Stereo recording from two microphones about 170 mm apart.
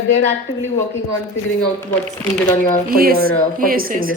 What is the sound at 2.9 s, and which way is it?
A woman's voice, 60° right (ahead or behind).